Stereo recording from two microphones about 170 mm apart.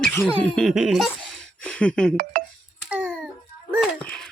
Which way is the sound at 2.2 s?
55° right (ahead or behind).